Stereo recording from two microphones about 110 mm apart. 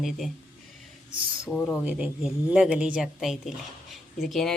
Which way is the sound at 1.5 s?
10° left (ahead or behind).